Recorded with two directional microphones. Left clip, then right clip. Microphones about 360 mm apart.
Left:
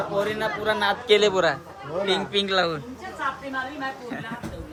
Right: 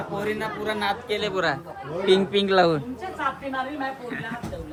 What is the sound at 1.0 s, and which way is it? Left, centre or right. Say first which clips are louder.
Speech: left 8 dB; left.